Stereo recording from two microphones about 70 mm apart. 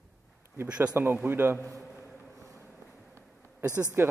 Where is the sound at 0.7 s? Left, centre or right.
Centre.